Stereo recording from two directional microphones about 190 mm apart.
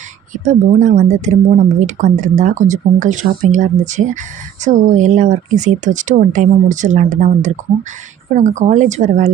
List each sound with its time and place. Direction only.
0.3 s speech: 40° right (ahead or behind)